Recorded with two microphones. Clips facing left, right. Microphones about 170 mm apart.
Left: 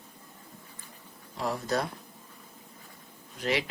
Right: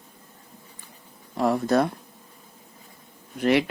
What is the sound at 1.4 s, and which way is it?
Speech, 60° right (ahead or behind).